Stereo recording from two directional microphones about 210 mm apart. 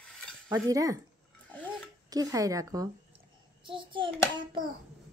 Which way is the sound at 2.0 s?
15° right (ahead or behind).